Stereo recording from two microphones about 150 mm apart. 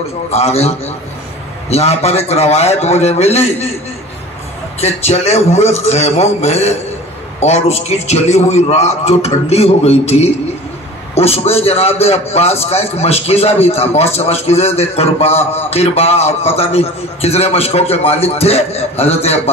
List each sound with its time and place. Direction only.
0.3 s a man's voice: 45° left (ahead or behind)
4.7 s a man's voice: 45° left (ahead or behind)